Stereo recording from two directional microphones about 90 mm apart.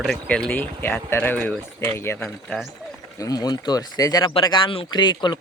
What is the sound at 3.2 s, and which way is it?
Speech, 45° left (ahead or behind).